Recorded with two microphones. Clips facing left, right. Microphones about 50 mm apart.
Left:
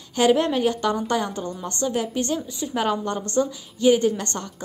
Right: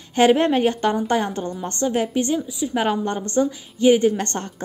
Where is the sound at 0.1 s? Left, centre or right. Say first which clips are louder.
Right 3 dB; right.